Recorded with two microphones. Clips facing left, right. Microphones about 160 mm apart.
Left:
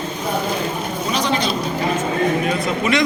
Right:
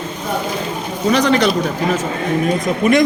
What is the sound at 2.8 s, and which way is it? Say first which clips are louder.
Speech: right 6 dB; 50° right (ahead or behind).